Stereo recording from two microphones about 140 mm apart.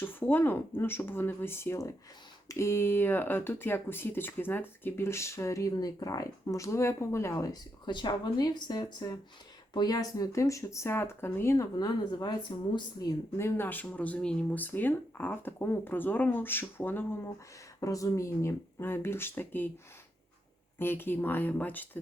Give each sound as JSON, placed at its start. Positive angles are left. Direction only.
{"t": 0.0, "sound": "speech", "side_deg": 15}
{"t": 20.7, "sound": "speech", "side_deg": 15}